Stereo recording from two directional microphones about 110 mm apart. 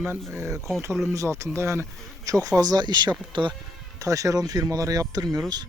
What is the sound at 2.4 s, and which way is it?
Speech, 35° right (ahead or behind).